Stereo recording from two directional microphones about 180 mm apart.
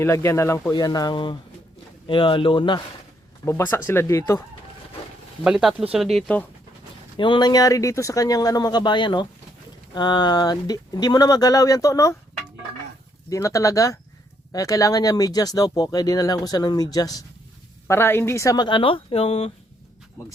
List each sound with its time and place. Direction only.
0.0 s speech: 15° left (ahead or behind)
3.4 s speech: 10° left (ahead or behind)
5.4 s speech: 5° right (ahead or behind)
7.2 s speech: 25° left (ahead or behind)
13.3 s speech: 15° left (ahead or behind); by 19.5 s 35° left (ahead or behind)